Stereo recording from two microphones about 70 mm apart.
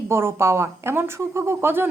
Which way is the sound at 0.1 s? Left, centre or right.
Right.